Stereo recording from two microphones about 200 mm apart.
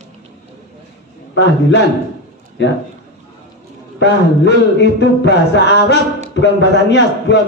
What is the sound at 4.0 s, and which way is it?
Speech, 60° left (ahead or behind).